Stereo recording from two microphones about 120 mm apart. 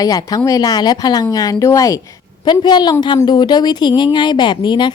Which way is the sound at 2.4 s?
40° left (ahead or behind).